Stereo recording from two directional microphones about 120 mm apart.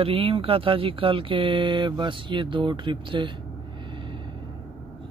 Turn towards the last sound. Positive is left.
turn(degrees=-45)  # may be behind; listen again after turning